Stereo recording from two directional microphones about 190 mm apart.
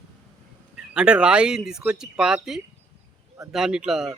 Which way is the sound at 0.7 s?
5° right (ahead or behind).